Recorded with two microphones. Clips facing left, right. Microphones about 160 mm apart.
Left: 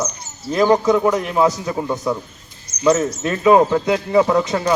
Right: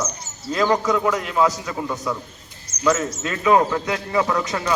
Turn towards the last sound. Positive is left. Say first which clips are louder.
# left 5 dB
turn(degrees=25)  # may be behind; listen again after turning